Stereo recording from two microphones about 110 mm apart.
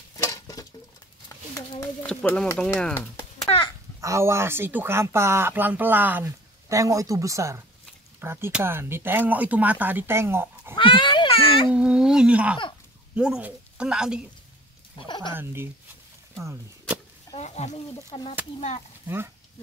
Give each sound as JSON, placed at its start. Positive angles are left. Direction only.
{"t": 0.2, "sound": "a sound", "side_deg": 30}
{"t": 2.0, "sound": "speech", "side_deg": 15}
{"t": 3.4, "sound": "a sound", "side_deg": 55}
{"t": 4.0, "sound": "speech", "side_deg": -25}
{"t": 6.2, "sound": "speech", "side_deg": -30}
{"t": 10.7, "sound": "a child's voice", "side_deg": 50}
{"t": 11.7, "sound": "speech", "side_deg": -10}
{"t": 15.0, "sound": "speech", "side_deg": 45}
{"t": 15.3, "sound": "speech", "side_deg": -20}
{"t": 17.4, "sound": "speech", "side_deg": 90}
{"t": 19.0, "sound": "speech", "side_deg": -20}